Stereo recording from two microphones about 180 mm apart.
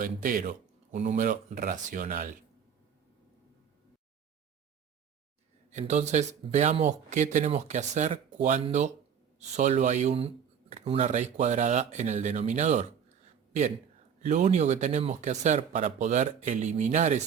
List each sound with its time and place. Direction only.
0.0 s speech: 50° right (ahead or behind)
5.7 s speech: 40° right (ahead or behind)
14.2 s speech: 40° right (ahead or behind)